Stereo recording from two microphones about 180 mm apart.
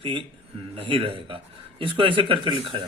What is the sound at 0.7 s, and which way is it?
Speech, 30° right (ahead or behind).